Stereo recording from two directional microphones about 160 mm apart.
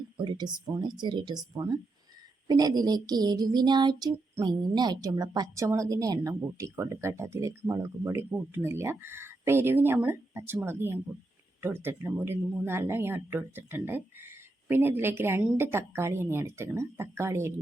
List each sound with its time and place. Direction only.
0.2 s a woman's voice: 30° right (ahead or behind)